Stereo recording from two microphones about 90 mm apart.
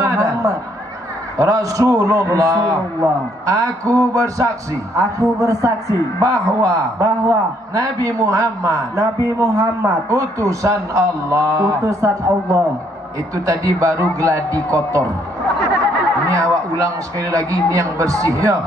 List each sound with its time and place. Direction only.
0.0 s a sound: 40° right (ahead or behind)
1.4 s a man's voice: 40° right (ahead or behind)
16.3 s a man's voice: 40° right (ahead or behind)